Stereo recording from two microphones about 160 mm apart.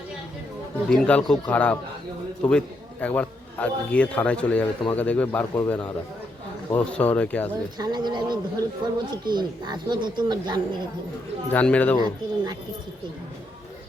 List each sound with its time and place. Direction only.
0.9 s a man's voice: 5° left (ahead or behind)
7.8 s speech: 25° right (ahead or behind)
11.5 s a man's voice: 10° left (ahead or behind)
11.9 s speech: 25° right (ahead or behind)